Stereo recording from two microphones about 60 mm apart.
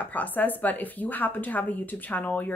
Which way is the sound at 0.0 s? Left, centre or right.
Left.